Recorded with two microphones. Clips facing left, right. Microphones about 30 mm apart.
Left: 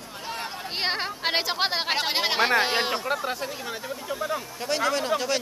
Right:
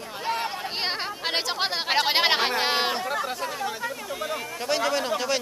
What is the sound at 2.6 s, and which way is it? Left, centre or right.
Speech, centre.